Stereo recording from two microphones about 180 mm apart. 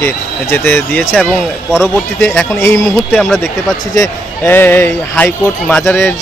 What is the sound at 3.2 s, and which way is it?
Speech, centre (ahead or behind).